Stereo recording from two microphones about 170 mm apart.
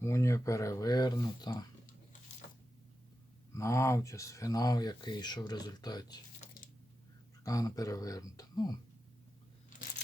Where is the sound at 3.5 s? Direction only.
15° left (ahead or behind).